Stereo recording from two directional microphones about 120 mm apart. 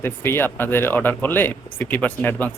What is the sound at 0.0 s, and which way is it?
Speech, 20° left (ahead or behind).